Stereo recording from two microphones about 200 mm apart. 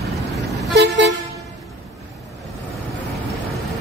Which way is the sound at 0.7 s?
55° right (ahead or behind).